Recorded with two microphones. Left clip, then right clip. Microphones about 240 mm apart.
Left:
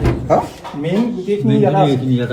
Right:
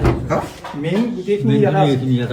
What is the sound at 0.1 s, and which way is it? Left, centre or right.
A man's voice, centre.